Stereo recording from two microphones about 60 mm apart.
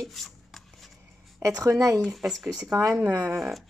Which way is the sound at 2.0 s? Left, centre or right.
Centre.